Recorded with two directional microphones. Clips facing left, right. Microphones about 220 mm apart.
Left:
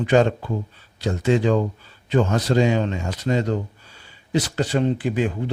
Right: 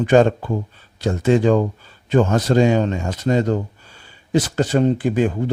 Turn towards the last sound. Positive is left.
turn(degrees=-45)  # may be behind; listen again after turning